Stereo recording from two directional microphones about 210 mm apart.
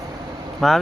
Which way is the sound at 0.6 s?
Centre (ahead or behind).